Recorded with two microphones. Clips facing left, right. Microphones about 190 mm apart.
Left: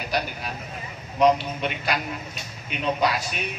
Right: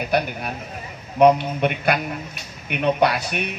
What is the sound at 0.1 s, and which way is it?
A man's voice, 60° right (ahead or behind).